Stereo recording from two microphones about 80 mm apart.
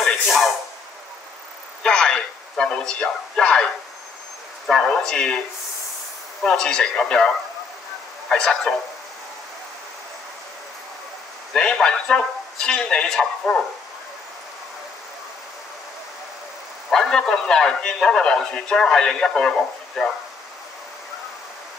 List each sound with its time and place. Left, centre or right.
0.0 s a sound: centre
1.8 s radio: centre
4.6 s a man's voice: centre
6.4 s a man's voice: centre
8.3 s a man's voice: centre
11.5 s a man's voice: centre
16.9 s a man's voice: centre